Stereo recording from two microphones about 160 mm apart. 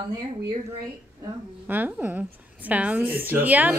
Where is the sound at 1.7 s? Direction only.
10° right (ahead or behind).